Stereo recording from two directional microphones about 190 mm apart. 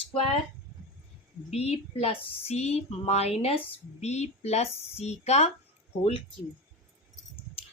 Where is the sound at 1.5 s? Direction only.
35° left (ahead or behind).